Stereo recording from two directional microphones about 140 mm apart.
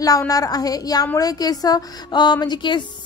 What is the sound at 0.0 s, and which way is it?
A woman's voice, 25° left (ahead or behind).